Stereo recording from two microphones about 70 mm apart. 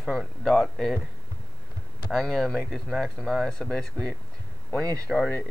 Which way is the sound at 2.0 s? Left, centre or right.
Centre.